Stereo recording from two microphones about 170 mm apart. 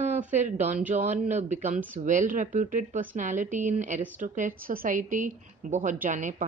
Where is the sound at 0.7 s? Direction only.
10° right (ahead or behind).